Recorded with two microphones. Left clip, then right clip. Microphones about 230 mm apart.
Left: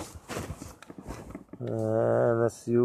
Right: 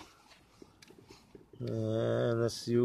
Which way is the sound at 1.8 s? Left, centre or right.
Centre.